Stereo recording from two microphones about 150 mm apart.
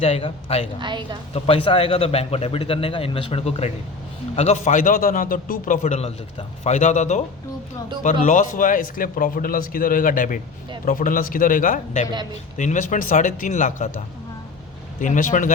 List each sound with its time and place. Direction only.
0.0 s a man's voice: 40° left (ahead or behind)
0.8 s a woman's voice: 30° right (ahead or behind)
1.3 s a man's voice: 40° left (ahead or behind)
8.2 s a man's voice: 60° left (ahead or behind)
15.0 s a man's voice: 60° left (ahead or behind)